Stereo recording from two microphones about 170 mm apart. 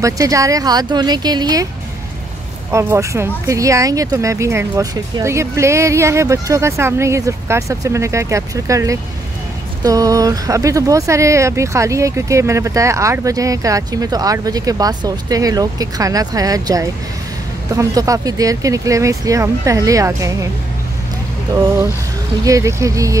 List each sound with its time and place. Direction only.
0.0 s speech: 20° right (ahead or behind)
2.7 s speech: 15° right (ahead or behind)
22.4 s speech: 20° right (ahead or behind)